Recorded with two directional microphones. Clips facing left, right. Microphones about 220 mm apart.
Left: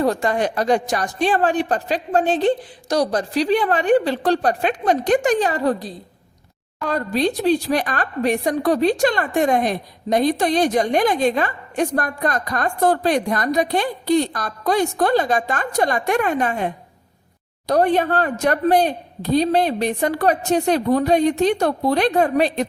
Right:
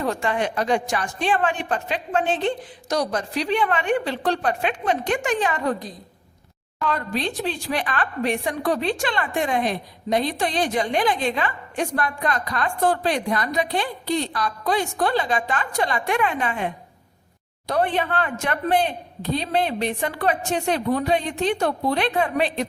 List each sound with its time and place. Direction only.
0.0 s speech: 40° left (ahead or behind)